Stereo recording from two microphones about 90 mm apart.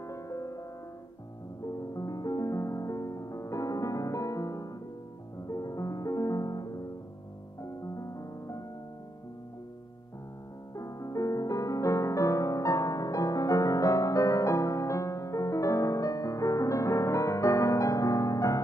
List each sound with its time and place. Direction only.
0.0 s music: 35° left (ahead or behind)
1.7 s music: 40° left (ahead or behind)
10.8 s music: 40° left (ahead or behind)